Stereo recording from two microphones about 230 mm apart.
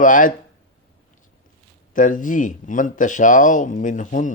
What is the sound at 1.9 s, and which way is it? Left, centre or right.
A man's voice, left.